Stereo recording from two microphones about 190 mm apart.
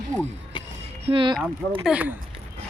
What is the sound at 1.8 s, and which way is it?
Speech, 5° right (ahead or behind).